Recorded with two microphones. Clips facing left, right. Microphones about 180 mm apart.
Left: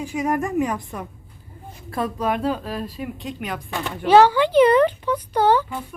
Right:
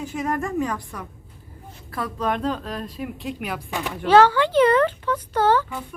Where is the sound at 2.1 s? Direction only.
5° left (ahead or behind).